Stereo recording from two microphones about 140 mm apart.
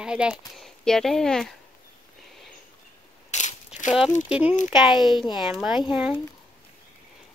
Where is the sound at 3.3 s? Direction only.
55° left (ahead or behind).